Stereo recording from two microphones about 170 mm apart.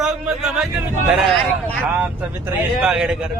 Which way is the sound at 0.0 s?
5° right (ahead or behind).